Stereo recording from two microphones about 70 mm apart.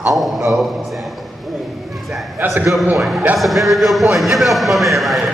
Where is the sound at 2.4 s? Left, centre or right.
Right.